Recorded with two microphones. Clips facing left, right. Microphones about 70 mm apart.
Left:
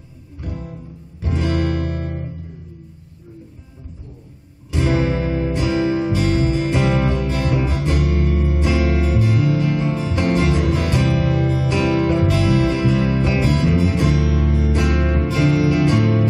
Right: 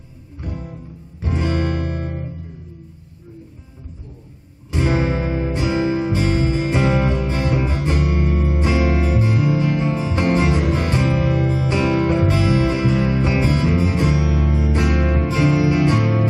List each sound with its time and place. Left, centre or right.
1.2 s music: right
4.6 s music: right